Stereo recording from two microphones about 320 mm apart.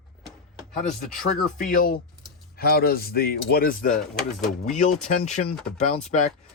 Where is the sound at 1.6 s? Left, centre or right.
Left.